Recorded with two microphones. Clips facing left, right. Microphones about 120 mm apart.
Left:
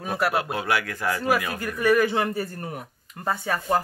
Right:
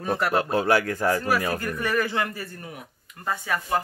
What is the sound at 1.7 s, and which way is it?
A man's voice, 10° left (ahead or behind).